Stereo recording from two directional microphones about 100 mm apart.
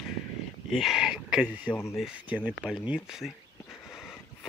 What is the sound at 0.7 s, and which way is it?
Speech, centre (ahead or behind).